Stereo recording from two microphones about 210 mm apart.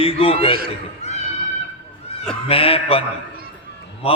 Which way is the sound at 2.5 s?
25° left (ahead or behind).